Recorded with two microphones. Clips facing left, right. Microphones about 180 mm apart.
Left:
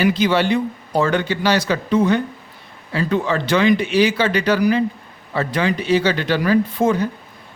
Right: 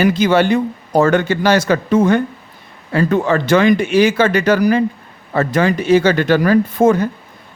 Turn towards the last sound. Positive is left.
turn(degrees=-50)  # may be behind; listen again after turning